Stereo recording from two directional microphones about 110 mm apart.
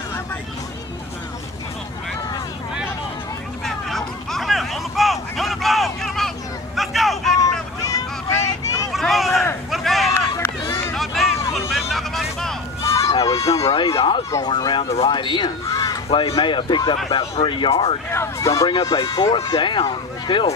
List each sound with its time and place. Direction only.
3.6 s vehicle: 5° left (ahead or behind)
7.4 s vehicle: 30° left (ahead or behind)
8.9 s a sound: centre (ahead or behind)
10.3 s run: 30° left (ahead or behind)
11.0 s a sound: centre (ahead or behind)
12.8 s a sound: 30° left (ahead or behind)
13.7 s speech: 50° left (ahead or behind)
14.4 s speech: 40° left (ahead or behind)
16.1 s speech: 50° left (ahead or behind)
18.1 s speech: 25° left (ahead or behind)
18.7 s speech: 45° left (ahead or behind)